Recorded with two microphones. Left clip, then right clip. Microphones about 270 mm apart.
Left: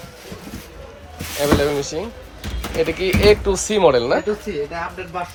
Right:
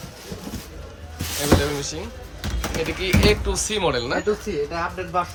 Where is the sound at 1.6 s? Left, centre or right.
Centre.